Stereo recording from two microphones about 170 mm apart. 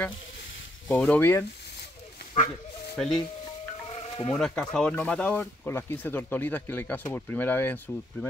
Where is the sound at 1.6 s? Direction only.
75° left (ahead or behind).